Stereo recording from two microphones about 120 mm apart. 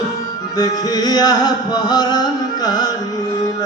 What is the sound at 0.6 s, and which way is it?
Music, 35° left (ahead or behind).